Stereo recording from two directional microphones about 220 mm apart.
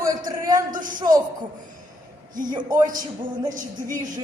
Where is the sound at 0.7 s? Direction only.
35° right (ahead or behind).